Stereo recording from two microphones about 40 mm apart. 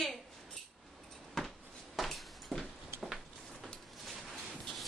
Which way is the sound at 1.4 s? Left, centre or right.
Centre.